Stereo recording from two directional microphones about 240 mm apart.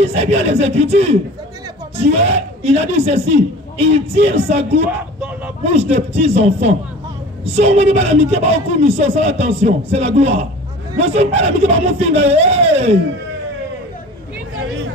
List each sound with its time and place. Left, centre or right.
0.0 s a woman's voice: right